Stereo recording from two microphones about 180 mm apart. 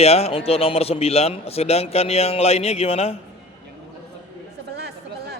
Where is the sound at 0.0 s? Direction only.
35° left (ahead or behind).